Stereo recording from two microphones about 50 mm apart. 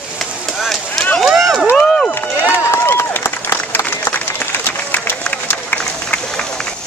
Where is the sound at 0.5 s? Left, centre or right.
Centre.